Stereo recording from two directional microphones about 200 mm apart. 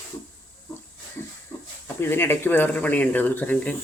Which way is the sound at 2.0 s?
10° left (ahead or behind).